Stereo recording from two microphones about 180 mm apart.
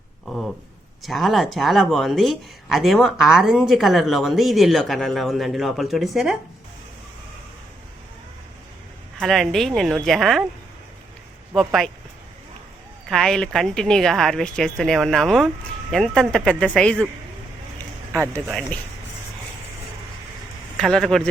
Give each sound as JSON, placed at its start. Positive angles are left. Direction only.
{"t": 0.3, "sound": "speech", "side_deg": 0}
{"t": 9.2, "sound": "speech", "side_deg": 0}
{"t": 11.5, "sound": "speech", "side_deg": 0}
{"t": 13.1, "sound": "speech", "side_deg": 5}
{"t": 18.4, "sound": "speech", "side_deg": 0}
{"t": 20.7, "sound": "speech", "side_deg": 0}